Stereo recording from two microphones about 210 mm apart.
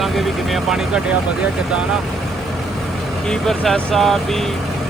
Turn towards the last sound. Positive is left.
turn(degrees=0)  # may be behind; listen again after turning